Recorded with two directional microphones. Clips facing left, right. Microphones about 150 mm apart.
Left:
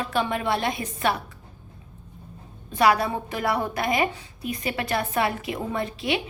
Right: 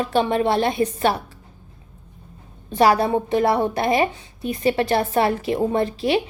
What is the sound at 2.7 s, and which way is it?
A woman's voice, 30° right (ahead or behind).